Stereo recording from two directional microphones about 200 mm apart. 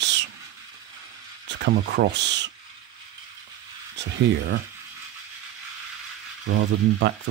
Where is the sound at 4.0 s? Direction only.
60° right (ahead or behind).